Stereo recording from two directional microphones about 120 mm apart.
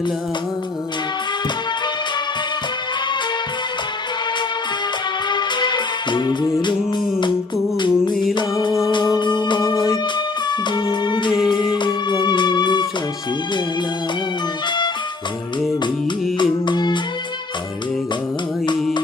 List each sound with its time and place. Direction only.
5.3 s music: 40° left (ahead or behind)
8.1 s music: centre (ahead or behind)
8.4 s music: 40° left (ahead or behind)
16.4 s music: 40° left (ahead or behind)